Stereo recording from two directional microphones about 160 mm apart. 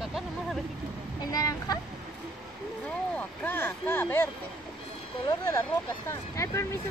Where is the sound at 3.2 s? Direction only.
10° left (ahead or behind).